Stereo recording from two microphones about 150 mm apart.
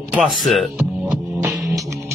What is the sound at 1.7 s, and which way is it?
Music, 20° right (ahead or behind).